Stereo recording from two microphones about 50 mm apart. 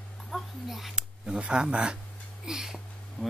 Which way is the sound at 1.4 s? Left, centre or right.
Right.